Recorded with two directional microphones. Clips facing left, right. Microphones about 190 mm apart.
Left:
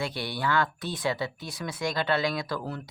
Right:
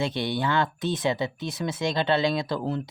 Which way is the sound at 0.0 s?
20° right (ahead or behind).